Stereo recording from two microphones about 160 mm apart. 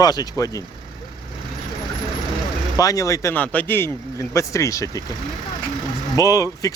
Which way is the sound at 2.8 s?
20° left (ahead or behind).